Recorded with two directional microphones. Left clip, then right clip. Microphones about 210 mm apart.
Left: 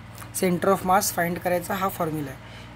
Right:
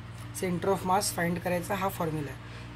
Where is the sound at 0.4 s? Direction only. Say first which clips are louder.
Left 7 dB; 40° left (ahead or behind).